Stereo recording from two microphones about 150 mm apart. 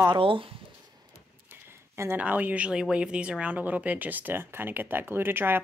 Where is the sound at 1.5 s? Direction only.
15° right (ahead or behind).